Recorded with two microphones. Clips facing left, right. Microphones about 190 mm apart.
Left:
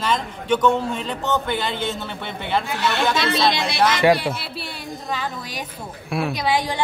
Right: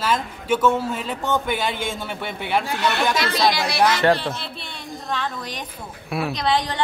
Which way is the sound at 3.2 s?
25° left (ahead or behind).